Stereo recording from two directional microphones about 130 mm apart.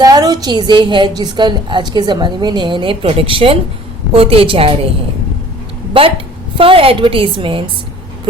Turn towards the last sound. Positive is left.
turn(degrees=-45)  # may be behind; listen again after turning